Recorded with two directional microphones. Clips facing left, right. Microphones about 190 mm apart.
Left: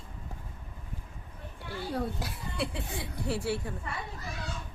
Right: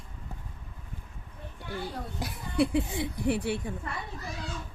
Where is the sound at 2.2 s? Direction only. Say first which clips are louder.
Right 7 dB; 20° right (ahead or behind).